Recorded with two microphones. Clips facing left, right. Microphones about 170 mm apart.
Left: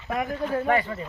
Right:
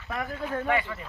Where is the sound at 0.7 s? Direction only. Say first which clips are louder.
Left 3 dB; 40° left (ahead or behind).